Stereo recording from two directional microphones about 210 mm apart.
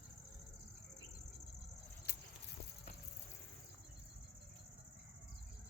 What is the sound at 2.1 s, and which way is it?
Vehicle, 50° left (ahead or behind).